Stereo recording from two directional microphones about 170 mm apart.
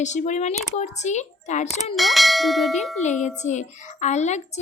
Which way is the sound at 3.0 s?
45° left (ahead or behind).